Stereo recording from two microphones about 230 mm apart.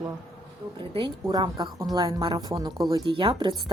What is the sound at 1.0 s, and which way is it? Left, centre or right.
Speech, centre.